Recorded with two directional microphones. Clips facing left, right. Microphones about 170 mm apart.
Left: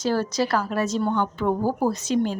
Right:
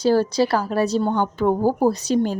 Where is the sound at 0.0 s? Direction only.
30° right (ahead or behind).